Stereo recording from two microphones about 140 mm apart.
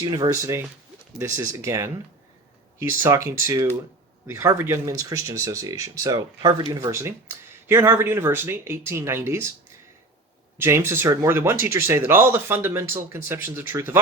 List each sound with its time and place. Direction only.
0.0 s speech: 30° right (ahead or behind)
10.6 s speech: 20° right (ahead or behind)